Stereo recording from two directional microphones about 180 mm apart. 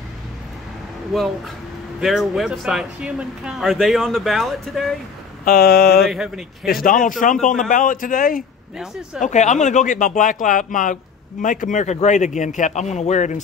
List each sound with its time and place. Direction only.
2.0 s speech: centre (ahead or behind)
5.4 s speech: 55° left (ahead or behind)
6.0 s speech: centre (ahead or behind)
6.7 s speech: 50° left (ahead or behind)